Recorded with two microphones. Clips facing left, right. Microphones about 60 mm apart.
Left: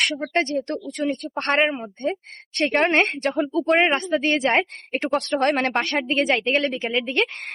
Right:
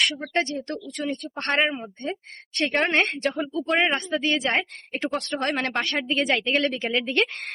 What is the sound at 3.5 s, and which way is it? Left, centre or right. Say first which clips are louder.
Speech: left 5 dB; left.